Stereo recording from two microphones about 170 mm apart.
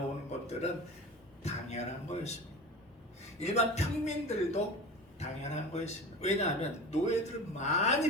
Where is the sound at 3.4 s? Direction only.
40° left (ahead or behind).